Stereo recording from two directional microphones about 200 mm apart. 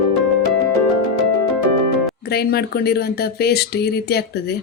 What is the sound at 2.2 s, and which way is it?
Speech, 50° left (ahead or behind).